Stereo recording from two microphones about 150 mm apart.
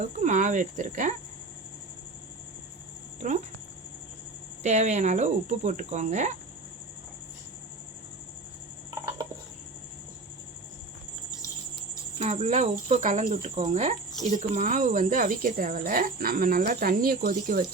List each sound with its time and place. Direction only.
0.0 s speech: 55° right (ahead or behind)
4.6 s speech: 50° right (ahead or behind)
12.2 s speech: 50° right (ahead or behind); by 17.7 s 70° right (ahead or behind)